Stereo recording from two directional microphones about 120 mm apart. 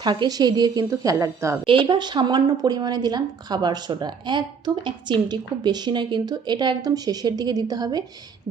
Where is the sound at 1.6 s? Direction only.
45° right (ahead or behind).